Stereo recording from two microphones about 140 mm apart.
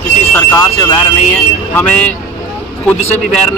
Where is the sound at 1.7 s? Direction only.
10° left (ahead or behind).